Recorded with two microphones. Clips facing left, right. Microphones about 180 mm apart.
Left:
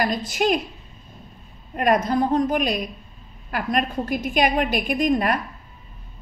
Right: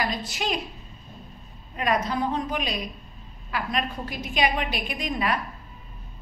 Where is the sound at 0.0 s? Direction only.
50° left (ahead or behind).